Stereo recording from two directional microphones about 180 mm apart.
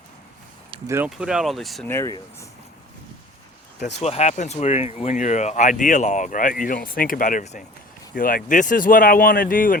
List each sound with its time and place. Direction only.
0.9 s speech: 15° right (ahead or behind)
1.9 s speech: 15° left (ahead or behind)
4.0 s speech: 35° left (ahead or behind)
8.1 s speech: 55° left (ahead or behind)